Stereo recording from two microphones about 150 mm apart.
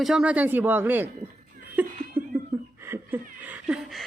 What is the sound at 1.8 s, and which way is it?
Laughter, 10° right (ahead or behind).